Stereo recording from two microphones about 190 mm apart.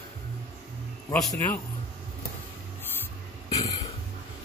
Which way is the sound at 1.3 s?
10° left (ahead or behind).